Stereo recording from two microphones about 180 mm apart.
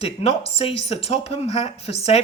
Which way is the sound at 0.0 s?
35° left (ahead or behind).